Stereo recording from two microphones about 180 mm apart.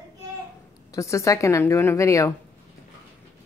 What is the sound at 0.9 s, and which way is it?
A woman's voice, 15° left (ahead or behind).